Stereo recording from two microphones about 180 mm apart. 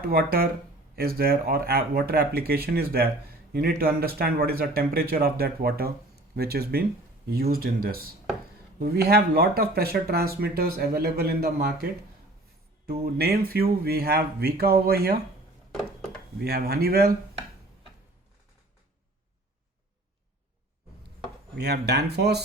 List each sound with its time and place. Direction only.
0.1 s speech: 55° right (ahead or behind)
13.1 s speech: 60° right (ahead or behind)
16.4 s speech: 60° right (ahead or behind)
21.5 s speech: 65° right (ahead or behind)